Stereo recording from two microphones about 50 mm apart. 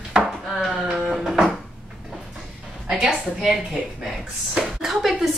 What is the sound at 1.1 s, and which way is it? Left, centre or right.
Speech, centre.